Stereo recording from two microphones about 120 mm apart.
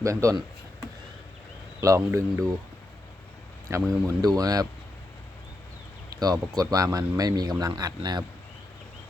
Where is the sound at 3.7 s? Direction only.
25° right (ahead or behind).